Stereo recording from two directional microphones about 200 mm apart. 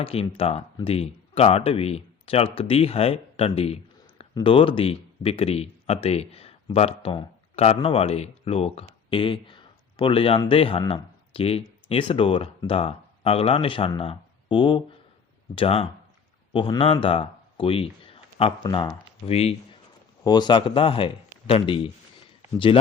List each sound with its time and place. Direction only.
0.0 s speech: 30° left (ahead or behind)